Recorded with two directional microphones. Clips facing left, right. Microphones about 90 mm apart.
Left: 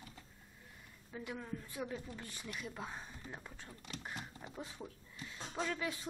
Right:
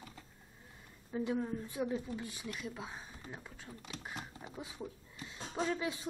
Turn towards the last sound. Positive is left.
turn(degrees=-25)  # may be behind; listen again after turning